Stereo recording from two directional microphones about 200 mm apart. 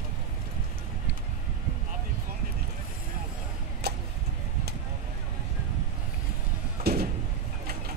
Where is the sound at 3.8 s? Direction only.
55° right (ahead or behind).